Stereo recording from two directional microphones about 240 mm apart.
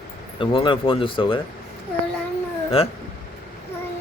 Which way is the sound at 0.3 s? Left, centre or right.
Left.